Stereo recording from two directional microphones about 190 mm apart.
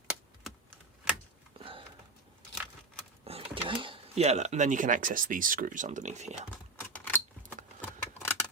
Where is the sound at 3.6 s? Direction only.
25° right (ahead or behind).